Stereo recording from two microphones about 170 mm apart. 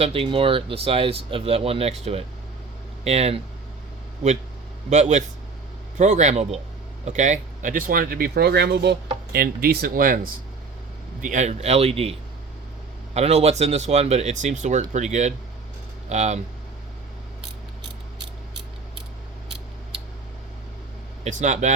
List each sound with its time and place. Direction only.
0.0 s speech: 35° right (ahead or behind)
3.0 s speech: 40° right (ahead or behind)
4.9 s speech: 45° right (ahead or behind); by 9.0 s 90° right
9.3 s speech: 60° right (ahead or behind)
11.2 s speech: 45° right (ahead or behind)
13.1 s speech: 40° right (ahead or behind)
21.2 s speech: 45° right (ahead or behind)